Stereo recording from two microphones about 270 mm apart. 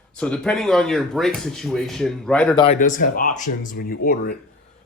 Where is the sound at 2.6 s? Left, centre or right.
Left.